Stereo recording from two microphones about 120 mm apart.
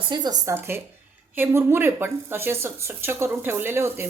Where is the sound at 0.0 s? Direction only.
40° right (ahead or behind).